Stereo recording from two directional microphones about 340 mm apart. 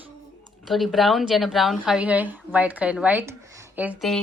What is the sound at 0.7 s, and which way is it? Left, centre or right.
A woman's voice, centre.